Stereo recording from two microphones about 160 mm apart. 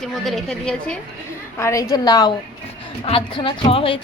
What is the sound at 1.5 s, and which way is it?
A woman's voice, 20° left (ahead or behind).